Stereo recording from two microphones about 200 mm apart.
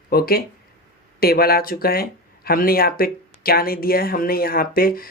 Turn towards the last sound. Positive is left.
turn(degrees=45)  # may be behind; listen again after turning